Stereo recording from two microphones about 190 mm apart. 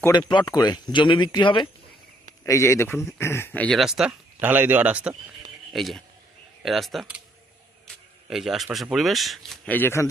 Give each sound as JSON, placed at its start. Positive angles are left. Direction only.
{"t": 0.0, "sound": "speech", "side_deg": 20}
{"t": 8.3, "sound": "speech", "side_deg": 0}